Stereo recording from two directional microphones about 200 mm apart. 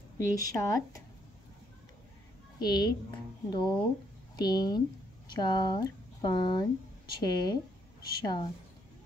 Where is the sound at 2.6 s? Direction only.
20° left (ahead or behind).